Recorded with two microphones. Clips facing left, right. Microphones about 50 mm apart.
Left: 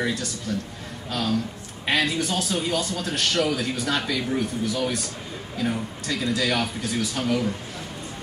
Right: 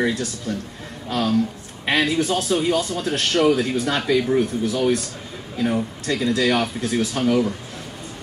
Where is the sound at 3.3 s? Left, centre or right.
Right.